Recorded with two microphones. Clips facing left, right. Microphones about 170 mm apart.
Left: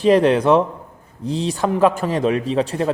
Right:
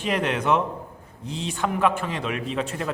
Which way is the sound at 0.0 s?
35° left (ahead or behind).